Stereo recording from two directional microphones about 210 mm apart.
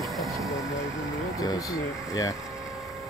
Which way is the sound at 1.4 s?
15° left (ahead or behind).